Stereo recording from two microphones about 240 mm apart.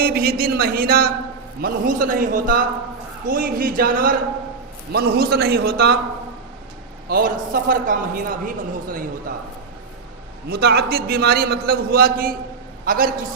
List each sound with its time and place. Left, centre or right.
0.0 s a man's voice: right
7.1 s a man's voice: right
10.5 s a man's voice: right